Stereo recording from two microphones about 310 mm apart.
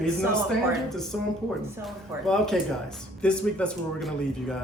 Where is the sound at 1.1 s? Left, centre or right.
Centre.